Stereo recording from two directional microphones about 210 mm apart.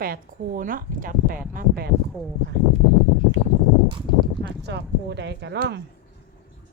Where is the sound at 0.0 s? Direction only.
45° right (ahead or behind).